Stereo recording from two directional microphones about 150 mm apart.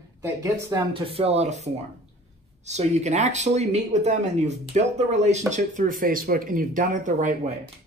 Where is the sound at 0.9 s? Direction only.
40° right (ahead or behind).